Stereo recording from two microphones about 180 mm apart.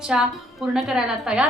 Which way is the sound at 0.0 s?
5° right (ahead or behind).